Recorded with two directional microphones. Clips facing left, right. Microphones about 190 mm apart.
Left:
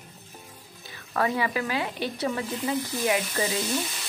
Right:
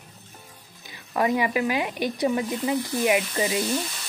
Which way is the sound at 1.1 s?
15° right (ahead or behind).